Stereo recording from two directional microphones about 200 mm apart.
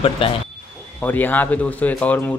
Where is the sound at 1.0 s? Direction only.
10° left (ahead or behind).